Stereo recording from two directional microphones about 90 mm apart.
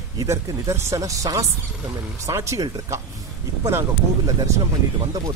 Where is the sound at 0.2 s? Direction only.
30° right (ahead or behind).